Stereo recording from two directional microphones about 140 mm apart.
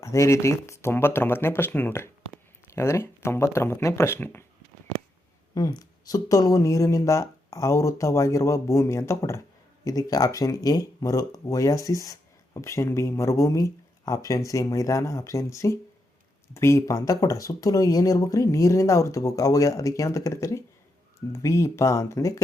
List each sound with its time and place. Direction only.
0.0 s speech: 20° left (ahead or behind)
5.5 s speech: 25° left (ahead or behind)